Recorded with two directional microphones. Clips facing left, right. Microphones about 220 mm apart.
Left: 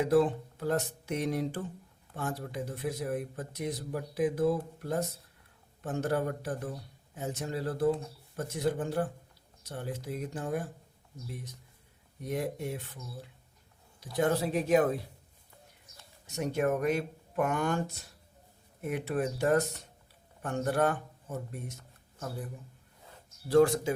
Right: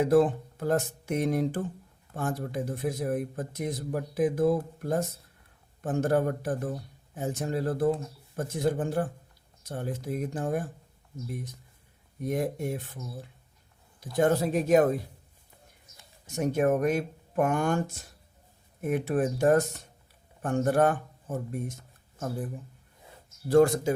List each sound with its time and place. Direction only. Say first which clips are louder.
0.0 s speech: right 3 dB; 50° right (ahead or behind)
12.2 s speech: right 4 dB; 50° right (ahead or behind)
14.2 s speech: right 4 dB; 45° right (ahead or behind)
16.2 s speech: right 4 dB; 50° right (ahead or behind)
23.5 s speech: right 3 dB; 45° right (ahead or behind)